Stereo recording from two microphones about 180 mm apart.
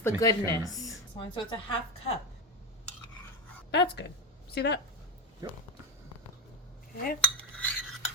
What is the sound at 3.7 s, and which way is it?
A woman's voice, 70° left (ahead or behind).